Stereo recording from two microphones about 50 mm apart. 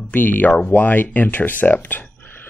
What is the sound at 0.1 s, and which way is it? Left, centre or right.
Speech, left.